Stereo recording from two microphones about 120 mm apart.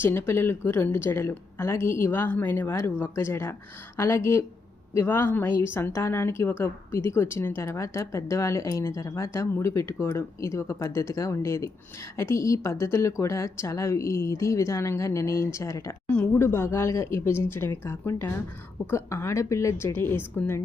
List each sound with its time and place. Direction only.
0.0 s speech: 20° left (ahead or behind)